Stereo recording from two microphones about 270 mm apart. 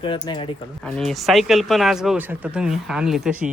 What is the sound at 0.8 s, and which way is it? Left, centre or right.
Speech, centre.